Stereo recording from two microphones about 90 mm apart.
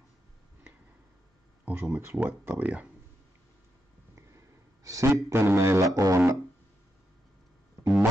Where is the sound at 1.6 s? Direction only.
25° right (ahead or behind).